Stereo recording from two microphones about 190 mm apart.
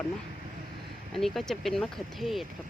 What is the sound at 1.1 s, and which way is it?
Speech, centre (ahead or behind).